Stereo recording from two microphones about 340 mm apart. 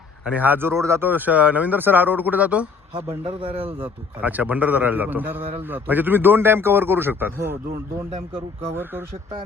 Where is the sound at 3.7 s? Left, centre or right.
Centre.